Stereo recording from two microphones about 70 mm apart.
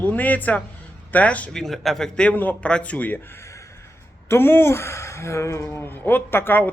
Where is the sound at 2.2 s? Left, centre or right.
Left.